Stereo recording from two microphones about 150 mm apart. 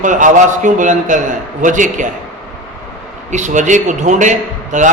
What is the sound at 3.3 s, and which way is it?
A man's voice, 55° right (ahead or behind).